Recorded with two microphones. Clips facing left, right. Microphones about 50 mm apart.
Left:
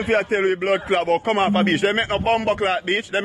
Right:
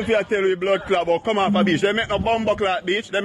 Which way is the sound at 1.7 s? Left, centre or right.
Left.